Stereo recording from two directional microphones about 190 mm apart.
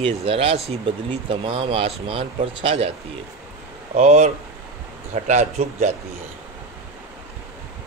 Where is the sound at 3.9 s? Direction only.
35° right (ahead or behind).